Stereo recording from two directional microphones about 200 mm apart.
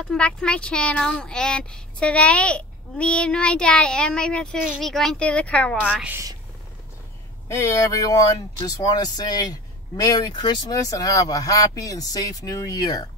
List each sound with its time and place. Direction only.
0.1 s speech: 5° left (ahead or behind)
6.0 s a woman's voice: 15° right (ahead or behind)
7.4 s speech: 15° left (ahead or behind)